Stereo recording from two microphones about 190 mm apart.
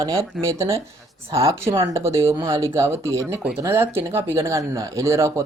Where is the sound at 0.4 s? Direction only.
15° right (ahead or behind).